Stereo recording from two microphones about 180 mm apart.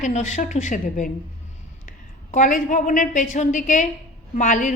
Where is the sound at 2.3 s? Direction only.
45° left (ahead or behind).